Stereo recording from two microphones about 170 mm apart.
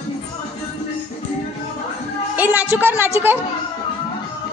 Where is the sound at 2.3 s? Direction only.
10° right (ahead or behind).